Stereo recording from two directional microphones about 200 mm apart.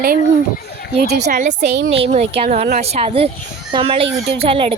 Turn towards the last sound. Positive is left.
turn(degrees=-30)  # may be behind; listen again after turning